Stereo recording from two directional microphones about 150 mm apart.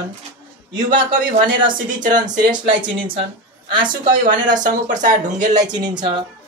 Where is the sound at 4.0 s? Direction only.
60° right (ahead or behind).